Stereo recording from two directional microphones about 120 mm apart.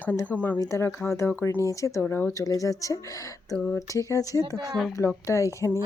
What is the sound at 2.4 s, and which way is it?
Speech, 30° left (ahead or behind).